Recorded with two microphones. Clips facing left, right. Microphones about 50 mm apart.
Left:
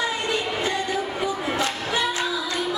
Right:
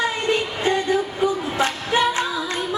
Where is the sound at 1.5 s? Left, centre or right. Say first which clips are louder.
Right 4 dB; right.